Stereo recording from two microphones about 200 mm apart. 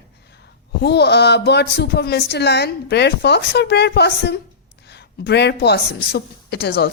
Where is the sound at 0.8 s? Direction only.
55° left (ahead or behind).